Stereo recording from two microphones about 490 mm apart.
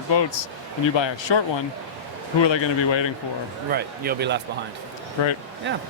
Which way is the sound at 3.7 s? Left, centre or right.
Centre.